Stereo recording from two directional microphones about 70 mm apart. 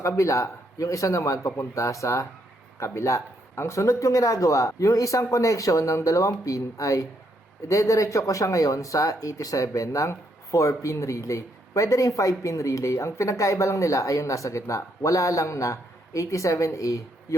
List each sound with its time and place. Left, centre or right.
0.2 s speech: left